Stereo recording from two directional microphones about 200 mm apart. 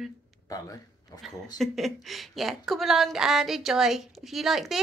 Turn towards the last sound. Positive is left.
turn(degrees=0)  # may be behind; listen again after turning